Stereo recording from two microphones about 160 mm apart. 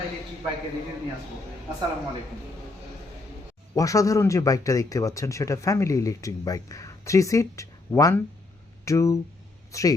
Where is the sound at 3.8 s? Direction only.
20° left (ahead or behind).